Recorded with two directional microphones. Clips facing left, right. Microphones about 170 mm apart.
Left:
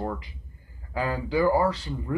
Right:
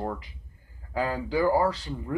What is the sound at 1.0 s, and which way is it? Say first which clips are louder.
Speech: left 1 dB; 40° right (ahead or behind).